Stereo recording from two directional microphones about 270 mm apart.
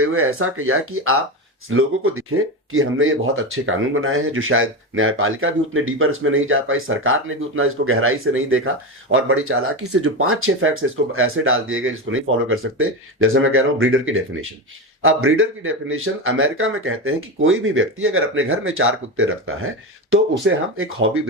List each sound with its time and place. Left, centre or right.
0.0 s speech: right